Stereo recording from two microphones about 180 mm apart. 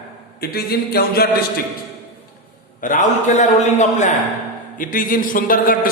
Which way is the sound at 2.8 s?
45° left (ahead or behind).